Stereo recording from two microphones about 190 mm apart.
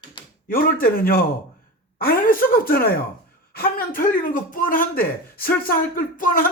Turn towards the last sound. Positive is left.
turn(degrees=50)  # may be behind; listen again after turning